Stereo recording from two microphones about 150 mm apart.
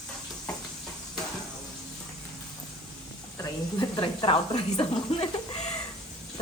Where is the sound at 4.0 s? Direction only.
35° left (ahead or behind).